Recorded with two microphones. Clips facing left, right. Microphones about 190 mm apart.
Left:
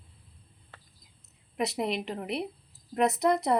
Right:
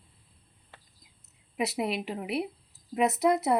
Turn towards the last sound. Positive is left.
turn(degrees=-5)  # may be behind; listen again after turning